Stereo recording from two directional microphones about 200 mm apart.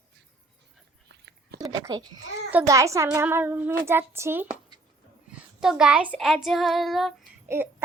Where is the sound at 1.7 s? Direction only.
15° right (ahead or behind); by 7.1 s centre (ahead or behind).